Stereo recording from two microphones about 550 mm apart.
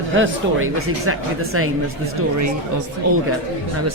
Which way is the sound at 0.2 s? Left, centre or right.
Right.